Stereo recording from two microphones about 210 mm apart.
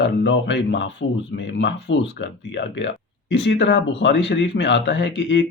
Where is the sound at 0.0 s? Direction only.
60° left (ahead or behind).